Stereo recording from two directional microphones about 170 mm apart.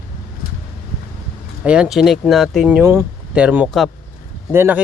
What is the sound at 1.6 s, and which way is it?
Speech, 5° right (ahead or behind).